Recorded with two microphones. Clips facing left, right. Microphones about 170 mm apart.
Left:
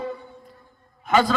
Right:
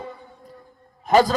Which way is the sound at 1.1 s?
40° right (ahead or behind).